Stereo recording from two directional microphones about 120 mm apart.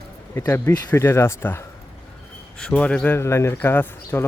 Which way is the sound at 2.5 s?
10° left (ahead or behind).